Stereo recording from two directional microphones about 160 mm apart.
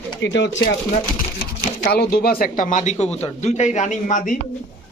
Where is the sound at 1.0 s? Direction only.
55° left (ahead or behind).